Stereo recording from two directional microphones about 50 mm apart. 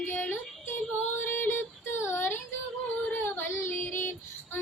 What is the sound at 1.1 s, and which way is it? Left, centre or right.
Music, left.